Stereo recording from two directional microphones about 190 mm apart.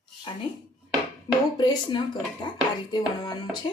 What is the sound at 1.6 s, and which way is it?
Speech, 25° left (ahead or behind).